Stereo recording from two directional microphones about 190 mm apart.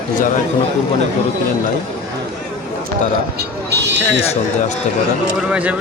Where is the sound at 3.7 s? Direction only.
65° right (ahead or behind).